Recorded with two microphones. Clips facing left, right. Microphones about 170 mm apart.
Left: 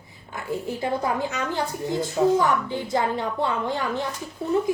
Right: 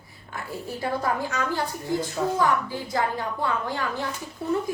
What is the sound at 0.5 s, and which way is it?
A child's voice, 20° left (ahead or behind).